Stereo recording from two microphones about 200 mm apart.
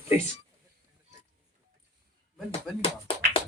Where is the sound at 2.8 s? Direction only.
25° left (ahead or behind).